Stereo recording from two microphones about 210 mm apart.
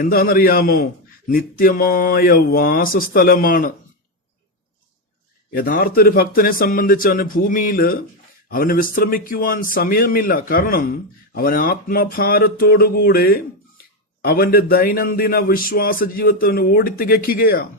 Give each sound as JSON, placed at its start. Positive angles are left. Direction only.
{"t": 0.0, "sound": "a man's voice", "side_deg": 45}
{"t": 5.5, "sound": "a man's voice", "side_deg": 45}